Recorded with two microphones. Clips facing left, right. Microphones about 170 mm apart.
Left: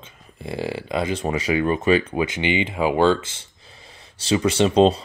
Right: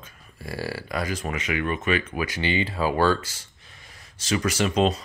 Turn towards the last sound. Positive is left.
turn(degrees=30)  # may be behind; listen again after turning